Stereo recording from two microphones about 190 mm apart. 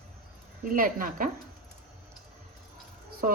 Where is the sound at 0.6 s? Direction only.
45° right (ahead or behind).